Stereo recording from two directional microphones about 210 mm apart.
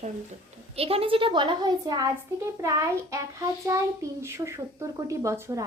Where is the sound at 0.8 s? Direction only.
25° right (ahead or behind).